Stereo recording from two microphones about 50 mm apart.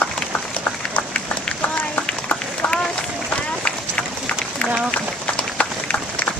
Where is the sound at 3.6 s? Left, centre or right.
Left.